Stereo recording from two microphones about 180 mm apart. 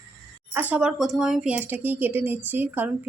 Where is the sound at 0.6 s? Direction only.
10° right (ahead or behind).